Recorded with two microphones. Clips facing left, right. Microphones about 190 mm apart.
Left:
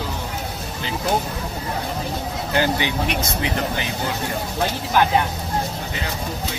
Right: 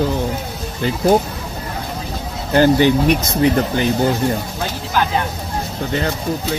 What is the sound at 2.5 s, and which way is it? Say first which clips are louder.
Speech: right 10 dB; 45° right (ahead or behind).